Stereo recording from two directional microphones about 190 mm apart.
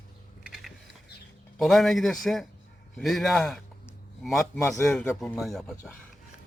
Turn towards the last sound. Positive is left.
turn(degrees=0)  # may be behind; listen again after turning